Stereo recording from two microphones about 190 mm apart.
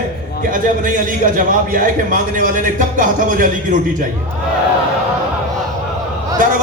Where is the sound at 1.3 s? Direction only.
45° right (ahead or behind).